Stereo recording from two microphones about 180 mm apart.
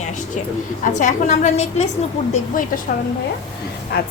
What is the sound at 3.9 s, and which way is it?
Speech, 65° left (ahead or behind).